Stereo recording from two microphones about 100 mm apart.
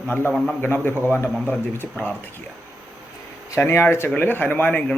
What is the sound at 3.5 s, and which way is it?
Speech, 25° left (ahead or behind).